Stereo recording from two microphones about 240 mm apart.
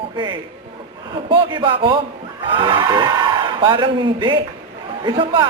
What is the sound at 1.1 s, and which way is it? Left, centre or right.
A man's voice, centre.